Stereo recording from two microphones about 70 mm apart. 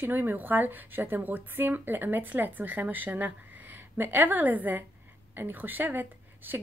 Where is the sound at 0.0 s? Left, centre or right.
Right.